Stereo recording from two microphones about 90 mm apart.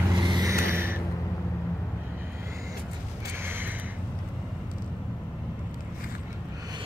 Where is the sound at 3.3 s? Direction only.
25° right (ahead or behind).